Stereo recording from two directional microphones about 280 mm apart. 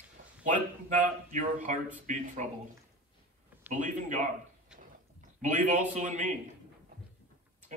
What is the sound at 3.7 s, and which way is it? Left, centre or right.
Speech, right.